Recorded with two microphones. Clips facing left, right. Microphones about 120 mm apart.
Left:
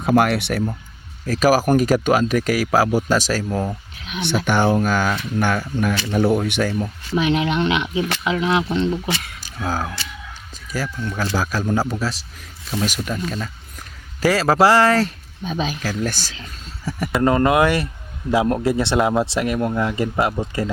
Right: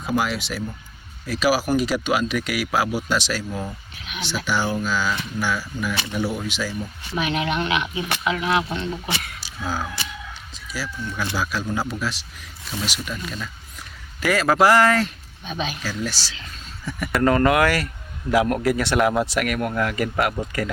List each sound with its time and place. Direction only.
0.0 s speech: 60° left (ahead or behind)
1.3 s speech: 45° left (ahead or behind)
4.4 s speech: 55° left (ahead or behind)
7.2 s speech: 25° left (ahead or behind)
9.4 s speech: 45° left (ahead or behind)
14.2 s speech: 30° left (ahead or behind); by 16.3 s 50° left (ahead or behind)
16.3 s speech: 35° left (ahead or behind)